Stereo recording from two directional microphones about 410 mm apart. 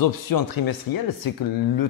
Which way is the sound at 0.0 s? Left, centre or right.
Left.